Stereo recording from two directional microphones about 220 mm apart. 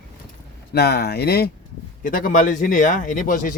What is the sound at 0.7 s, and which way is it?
Speech, 45° left (ahead or behind).